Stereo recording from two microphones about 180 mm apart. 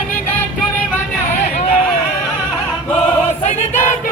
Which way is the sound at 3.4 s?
40° left (ahead or behind).